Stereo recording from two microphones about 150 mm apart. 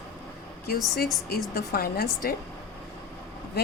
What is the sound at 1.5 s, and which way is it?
Speech, 90° left.